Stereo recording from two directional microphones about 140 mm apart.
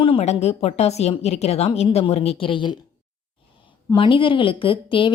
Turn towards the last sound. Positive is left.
turn(degrees=40)  # may be behind; listen again after turning